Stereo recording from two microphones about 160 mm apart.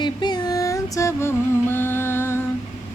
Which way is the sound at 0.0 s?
25° left (ahead or behind).